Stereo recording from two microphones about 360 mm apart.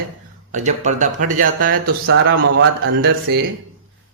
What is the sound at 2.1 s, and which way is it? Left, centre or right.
Speech, right.